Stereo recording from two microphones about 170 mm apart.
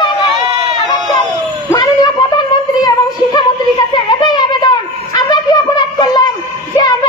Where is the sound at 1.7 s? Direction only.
25° left (ahead or behind).